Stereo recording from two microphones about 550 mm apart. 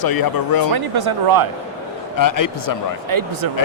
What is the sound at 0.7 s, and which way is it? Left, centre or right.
Speech, right.